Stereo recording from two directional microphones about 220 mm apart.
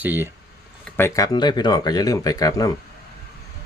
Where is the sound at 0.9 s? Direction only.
10° left (ahead or behind).